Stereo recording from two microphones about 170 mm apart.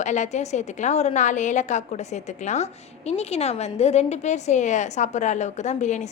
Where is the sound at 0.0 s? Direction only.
45° left (ahead or behind).